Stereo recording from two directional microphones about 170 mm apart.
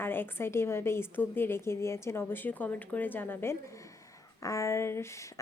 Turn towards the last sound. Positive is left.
turn(degrees=15)  # may be behind; listen again after turning